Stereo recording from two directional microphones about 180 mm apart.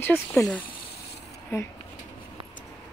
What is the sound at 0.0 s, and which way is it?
Speech, 10° left (ahead or behind).